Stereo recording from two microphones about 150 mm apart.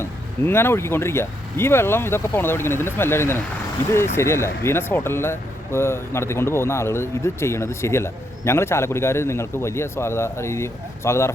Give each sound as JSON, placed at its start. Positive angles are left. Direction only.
{"t": 0.0, "sound": "speech", "side_deg": 15}